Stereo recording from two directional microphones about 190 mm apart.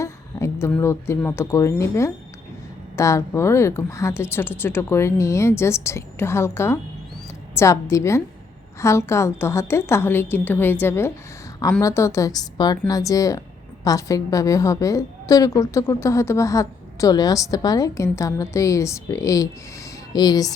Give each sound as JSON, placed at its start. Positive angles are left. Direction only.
{"t": 0.0, "sound": "a woman's voice", "side_deg": 15}